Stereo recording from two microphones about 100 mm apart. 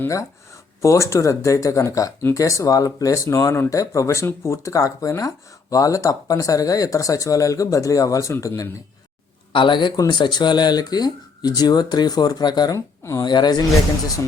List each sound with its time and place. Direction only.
0.8 s speech: 30° left (ahead or behind)
9.5 s speech: 55° left (ahead or behind)
12.7 s speech: 30° left (ahead or behind)
13.2 s speech: 45° left (ahead or behind)